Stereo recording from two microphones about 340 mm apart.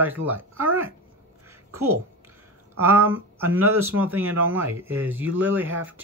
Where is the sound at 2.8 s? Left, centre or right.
Centre.